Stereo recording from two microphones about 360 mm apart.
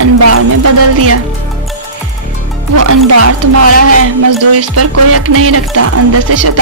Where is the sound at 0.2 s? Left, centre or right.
Right.